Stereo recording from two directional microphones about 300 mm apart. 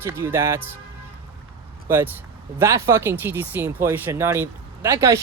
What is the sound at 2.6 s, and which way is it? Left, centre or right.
Speech, centre.